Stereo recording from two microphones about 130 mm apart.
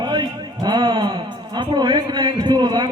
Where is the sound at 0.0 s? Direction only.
35° right (ahead or behind).